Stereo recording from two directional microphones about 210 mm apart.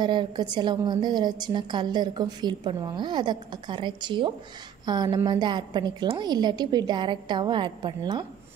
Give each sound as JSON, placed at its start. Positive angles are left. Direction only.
{"t": 0.0, "sound": "a woman's voice", "side_deg": -20}